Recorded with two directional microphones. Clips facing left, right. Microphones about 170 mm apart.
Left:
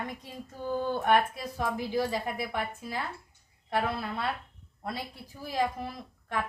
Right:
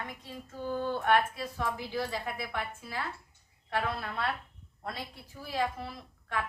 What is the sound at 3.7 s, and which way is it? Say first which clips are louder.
Speech: left 3 dB; 10° left (ahead or behind).